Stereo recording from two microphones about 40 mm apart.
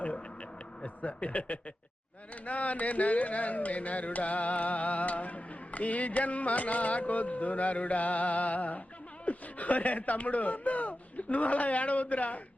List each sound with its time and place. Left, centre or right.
1.0 s speech: left